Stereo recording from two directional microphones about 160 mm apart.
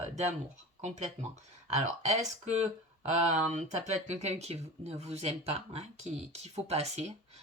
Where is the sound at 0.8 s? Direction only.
45° right (ahead or behind).